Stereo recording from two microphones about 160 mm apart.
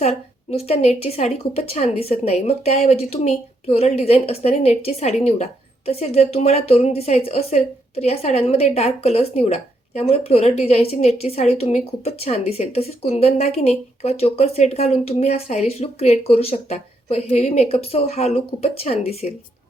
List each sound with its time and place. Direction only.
0.0 s a woman's voice: 40° left (ahead or behind)